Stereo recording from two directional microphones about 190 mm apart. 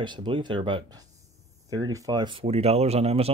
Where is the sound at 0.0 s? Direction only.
25° right (ahead or behind).